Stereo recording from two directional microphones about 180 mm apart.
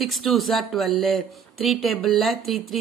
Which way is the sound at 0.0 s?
Centre (ahead or behind).